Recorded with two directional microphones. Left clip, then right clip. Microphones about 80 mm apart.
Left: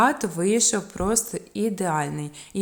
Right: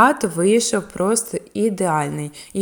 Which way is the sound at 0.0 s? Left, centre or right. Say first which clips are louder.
Right 6 dB; right.